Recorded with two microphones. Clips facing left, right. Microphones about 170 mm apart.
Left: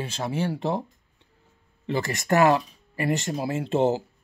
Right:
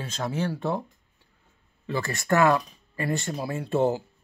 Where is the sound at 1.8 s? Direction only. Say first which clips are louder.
Left 2 dB; 20° left (ahead or behind).